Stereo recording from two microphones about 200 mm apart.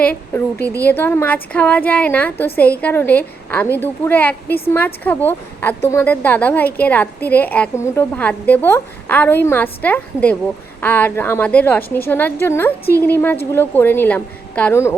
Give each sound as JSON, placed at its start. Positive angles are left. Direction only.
{"t": 0.0, "sound": "a woman's voice", "side_deg": 10}